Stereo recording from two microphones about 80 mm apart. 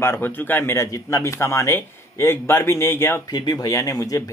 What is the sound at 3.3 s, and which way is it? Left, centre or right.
Speech, left.